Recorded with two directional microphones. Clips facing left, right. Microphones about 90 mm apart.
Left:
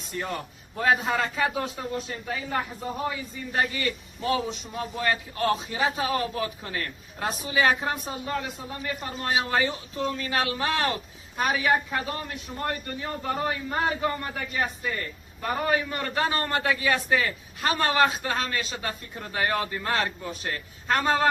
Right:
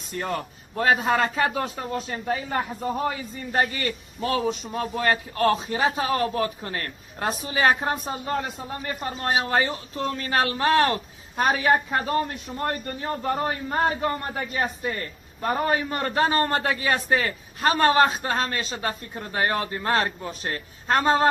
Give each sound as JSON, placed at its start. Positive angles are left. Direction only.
{"t": 0.2, "sound": "a man's voice", "side_deg": -50}